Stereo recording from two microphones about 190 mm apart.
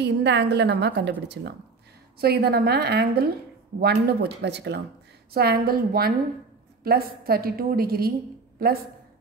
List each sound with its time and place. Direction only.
0.0 s a woman's voice: 65° right (ahead or behind)
2.1 s a woman's voice: 55° right (ahead or behind)